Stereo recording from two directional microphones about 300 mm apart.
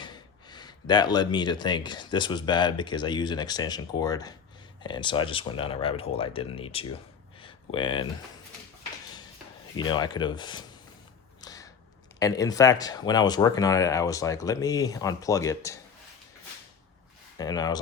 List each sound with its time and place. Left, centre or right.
0.0 s speech: centre
7.4 s a sound: centre
9.7 s speech: centre
11.3 s creak: centre
12.2 s speech: centre
17.3 s speech: centre